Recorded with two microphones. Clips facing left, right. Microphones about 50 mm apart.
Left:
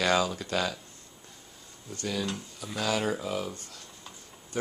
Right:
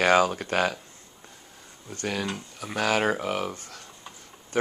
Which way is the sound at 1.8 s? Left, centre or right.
Right.